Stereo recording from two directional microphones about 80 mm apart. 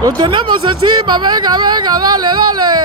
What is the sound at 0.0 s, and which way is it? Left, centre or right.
Speech, right.